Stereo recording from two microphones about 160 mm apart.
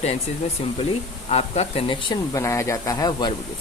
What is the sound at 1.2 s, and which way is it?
Speech, 40° left (ahead or behind).